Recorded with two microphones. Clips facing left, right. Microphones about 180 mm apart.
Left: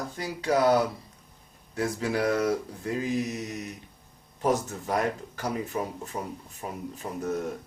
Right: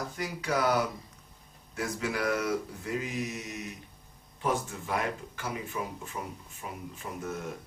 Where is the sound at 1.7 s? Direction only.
35° left (ahead or behind).